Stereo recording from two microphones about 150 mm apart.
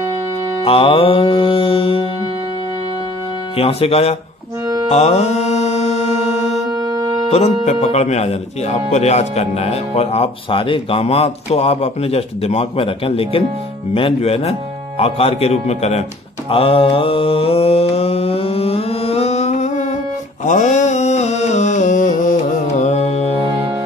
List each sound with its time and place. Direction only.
0.7 s mantra: 40° left (ahead or behind)
3.5 s mantra: 40° left (ahead or behind)
6.7 s music: 25° right (ahead or behind)
7.2 s speech: 45° left (ahead or behind)
13.9 s mantra: 40° left (ahead or behind)
15.0 s music: 40° left (ahead or behind)
20.4 s mantra: 55° left (ahead or behind)